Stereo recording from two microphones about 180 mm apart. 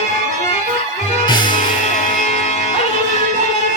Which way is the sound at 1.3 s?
25° left (ahead or behind).